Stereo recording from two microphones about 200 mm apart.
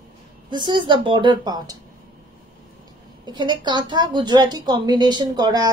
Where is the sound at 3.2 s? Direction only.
20° right (ahead or behind).